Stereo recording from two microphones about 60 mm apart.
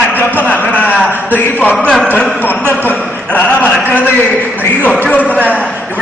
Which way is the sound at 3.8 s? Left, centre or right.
Right.